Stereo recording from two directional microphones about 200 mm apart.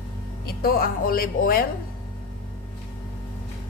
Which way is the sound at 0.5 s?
50° left (ahead or behind).